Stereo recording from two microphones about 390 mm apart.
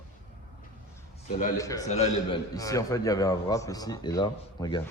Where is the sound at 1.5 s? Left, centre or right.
Centre.